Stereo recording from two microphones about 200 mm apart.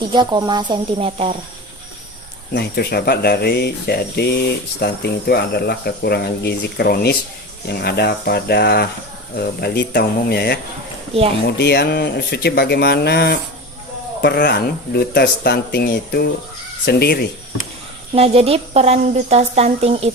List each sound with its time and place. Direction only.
0.1 s speech: 20° right (ahead or behind)
2.5 s speech: 55° left (ahead or behind)
18.1 s speech: 30° right (ahead or behind)